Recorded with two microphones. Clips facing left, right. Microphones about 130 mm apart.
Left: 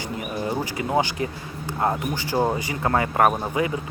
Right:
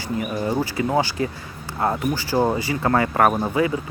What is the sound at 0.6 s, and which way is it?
Speech, 20° left (ahead or behind).